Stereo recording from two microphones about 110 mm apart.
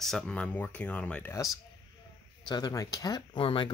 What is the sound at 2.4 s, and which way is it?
Speech, 40° left (ahead or behind).